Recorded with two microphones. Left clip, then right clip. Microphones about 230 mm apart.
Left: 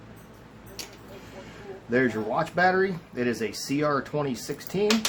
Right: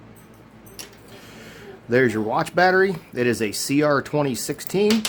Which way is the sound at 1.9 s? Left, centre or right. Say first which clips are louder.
Right 6 dB; right.